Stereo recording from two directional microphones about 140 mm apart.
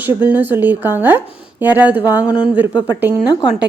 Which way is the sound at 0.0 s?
15° right (ahead or behind).